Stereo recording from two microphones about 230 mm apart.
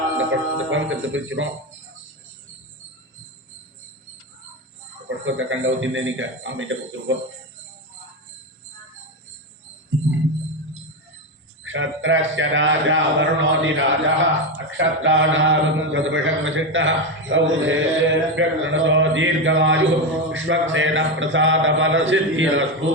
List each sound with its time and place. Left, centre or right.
0.2 s a man's voice: right
5.0 s a man's voice: right
11.6 s a man's voice: right